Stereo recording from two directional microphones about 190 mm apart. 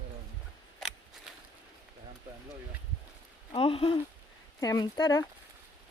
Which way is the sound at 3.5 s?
30° left (ahead or behind).